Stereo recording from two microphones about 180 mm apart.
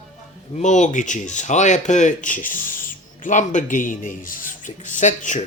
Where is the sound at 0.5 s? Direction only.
40° left (ahead or behind).